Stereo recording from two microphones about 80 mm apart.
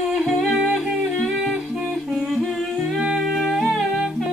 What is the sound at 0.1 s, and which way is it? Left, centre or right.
Music, centre.